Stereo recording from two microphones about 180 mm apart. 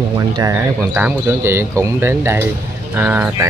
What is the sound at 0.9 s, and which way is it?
Speech, 10° right (ahead or behind).